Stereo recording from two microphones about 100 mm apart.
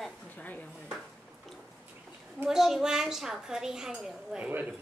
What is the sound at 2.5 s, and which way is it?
A woman's voice, 5° right (ahead or behind).